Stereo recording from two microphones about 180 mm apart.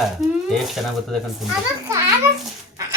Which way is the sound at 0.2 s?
Centre (ahead or behind).